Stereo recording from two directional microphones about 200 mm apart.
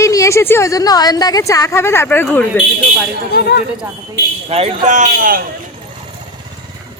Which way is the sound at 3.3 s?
55° left (ahead or behind).